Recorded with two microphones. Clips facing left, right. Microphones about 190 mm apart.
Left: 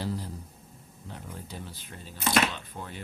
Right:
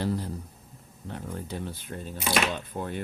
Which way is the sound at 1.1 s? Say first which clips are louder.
Right 6 dB; 60° right (ahead or behind).